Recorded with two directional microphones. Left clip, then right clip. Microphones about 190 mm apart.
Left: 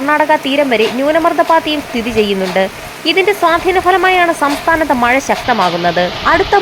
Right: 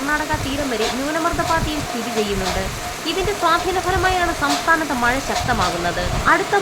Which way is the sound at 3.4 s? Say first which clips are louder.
Left 7 dB; 20° left (ahead or behind).